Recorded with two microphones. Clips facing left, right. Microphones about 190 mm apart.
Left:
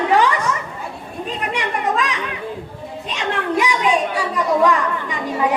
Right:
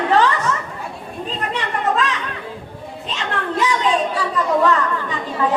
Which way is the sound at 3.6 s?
15° left (ahead or behind).